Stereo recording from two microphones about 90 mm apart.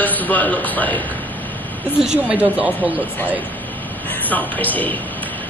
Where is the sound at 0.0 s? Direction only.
20° left (ahead or behind).